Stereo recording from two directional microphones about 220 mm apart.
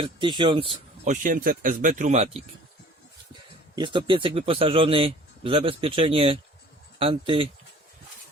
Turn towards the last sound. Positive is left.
turn(degrees=-25)  # may be behind; listen again after turning